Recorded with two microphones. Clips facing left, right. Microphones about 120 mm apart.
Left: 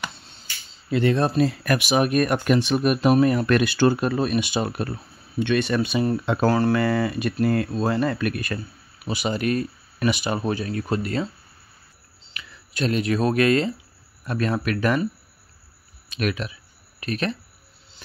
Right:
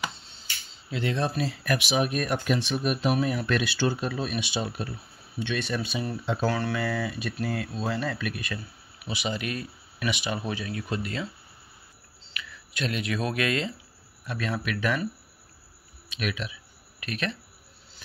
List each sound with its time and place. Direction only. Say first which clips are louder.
0.8 s speech: left 8 dB; 55° left (ahead or behind)
6.5 s speech: left 9 dB; 40° left (ahead or behind)
6.8 s speech: left 7 dB; 60° left (ahead or behind); by 11.2 s 45° left (ahead or behind)
12.4 s speech: left 6 dB; 35° left (ahead or behind)
16.1 s speech: left 6 dB; 45° left (ahead or behind)